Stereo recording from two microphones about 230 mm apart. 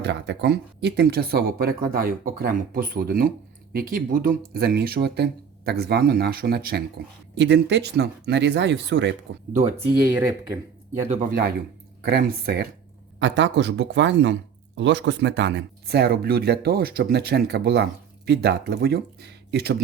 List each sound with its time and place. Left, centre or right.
0.0 s speech: right
10.0 s speech: centre
11.1 s speech: right